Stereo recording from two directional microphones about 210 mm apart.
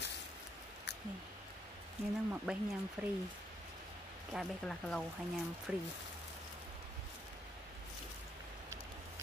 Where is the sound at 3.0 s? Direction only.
10° right (ahead or behind).